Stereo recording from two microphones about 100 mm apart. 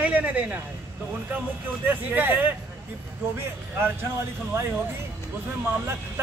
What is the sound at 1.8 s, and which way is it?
Speech, 20° right (ahead or behind).